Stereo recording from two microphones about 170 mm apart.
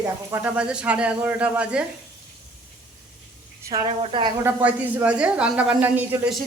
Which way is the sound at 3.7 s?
20° right (ahead or behind).